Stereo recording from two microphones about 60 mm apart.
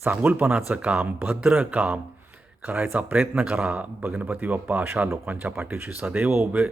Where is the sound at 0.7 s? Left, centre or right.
Right.